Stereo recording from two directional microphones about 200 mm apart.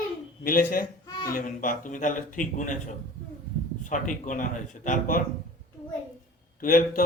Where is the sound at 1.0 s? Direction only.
20° left (ahead or behind).